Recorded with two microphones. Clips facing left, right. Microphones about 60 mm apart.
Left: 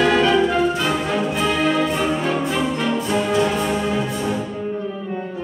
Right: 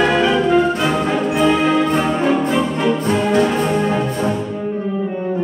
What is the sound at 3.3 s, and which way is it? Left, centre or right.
Music, right.